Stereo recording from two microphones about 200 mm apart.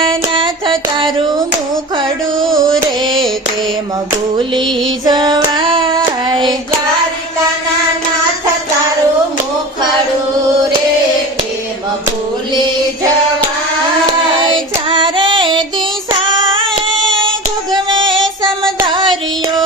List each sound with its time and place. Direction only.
0.1 s music: 25° right (ahead or behind)
2.4 s music: centre (ahead or behind)
3.1 s a sound: centre (ahead or behind)
5.0 s child singing: 20° right (ahead or behind)
14.4 s child singing: 25° right (ahead or behind)
17.7 s female singing: 25° right (ahead or behind)
18.1 s music: centre (ahead or behind)